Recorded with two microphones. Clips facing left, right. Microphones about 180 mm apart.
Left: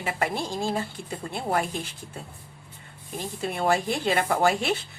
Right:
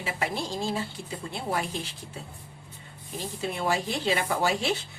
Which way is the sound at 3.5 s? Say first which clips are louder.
Left 4 dB; 55° left (ahead or behind).